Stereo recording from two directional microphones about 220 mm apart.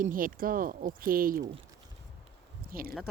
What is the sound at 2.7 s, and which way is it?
Speech, 40° right (ahead or behind).